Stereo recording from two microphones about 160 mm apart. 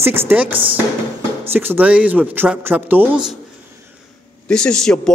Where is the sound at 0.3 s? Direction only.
10° right (ahead or behind).